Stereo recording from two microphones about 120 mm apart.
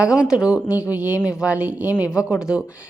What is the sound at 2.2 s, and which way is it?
Speech, 10° right (ahead or behind).